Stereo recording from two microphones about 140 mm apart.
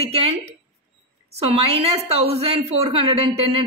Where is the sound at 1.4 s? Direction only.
45° right (ahead or behind).